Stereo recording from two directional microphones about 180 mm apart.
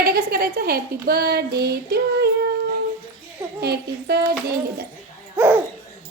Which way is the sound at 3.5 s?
60° right (ahead or behind).